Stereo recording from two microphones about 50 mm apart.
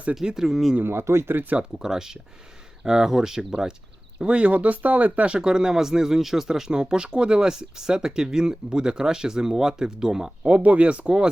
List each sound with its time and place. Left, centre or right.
0.1 s speech: centre
0.8 s speech: right
1.4 s speech: right
1.8 s speech: centre
10.4 s speech: right